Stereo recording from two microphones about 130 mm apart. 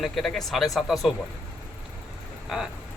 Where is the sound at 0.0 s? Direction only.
Centre (ahead or behind).